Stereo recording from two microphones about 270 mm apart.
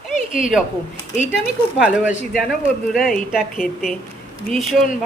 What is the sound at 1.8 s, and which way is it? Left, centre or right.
A woman's voice, centre.